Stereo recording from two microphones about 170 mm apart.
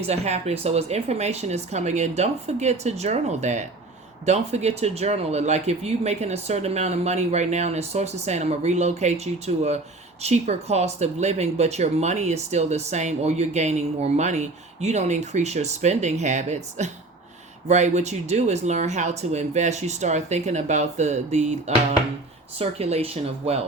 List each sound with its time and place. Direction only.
0.0 s speech: 40° right (ahead or behind)
22.5 s speech: 35° right (ahead or behind)